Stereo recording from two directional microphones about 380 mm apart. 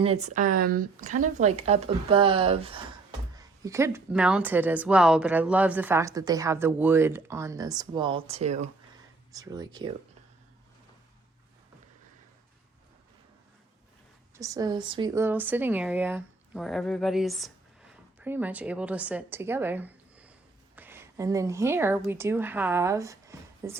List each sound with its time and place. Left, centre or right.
0.0 s a woman's voice: centre
14.3 s a woman's voice: centre